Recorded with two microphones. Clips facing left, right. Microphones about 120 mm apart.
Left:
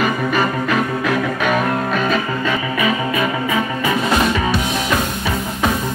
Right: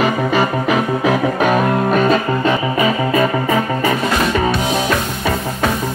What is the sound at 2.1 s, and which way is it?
Music, 35° right (ahead or behind).